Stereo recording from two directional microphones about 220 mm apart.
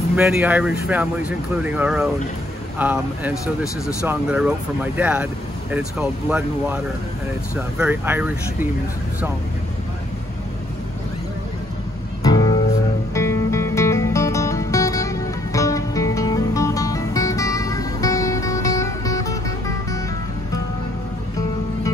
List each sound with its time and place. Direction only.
0.1 s speech: 5° right (ahead or behind)
12.2 s music: 15° left (ahead or behind)